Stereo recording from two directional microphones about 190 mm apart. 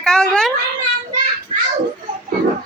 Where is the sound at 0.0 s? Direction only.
5° left (ahead or behind).